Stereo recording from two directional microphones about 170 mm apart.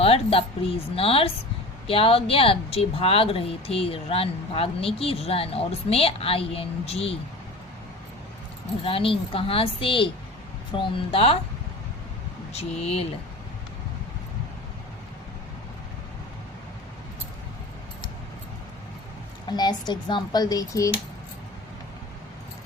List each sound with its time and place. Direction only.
0.0 s speech: 35° left (ahead or behind)
8.8 s speech: 35° left (ahead or behind)
12.5 s speech: 35° left (ahead or behind)
19.5 s speech: 25° left (ahead or behind)